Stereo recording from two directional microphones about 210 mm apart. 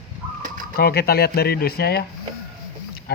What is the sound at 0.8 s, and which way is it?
Speech, 50° left (ahead or behind).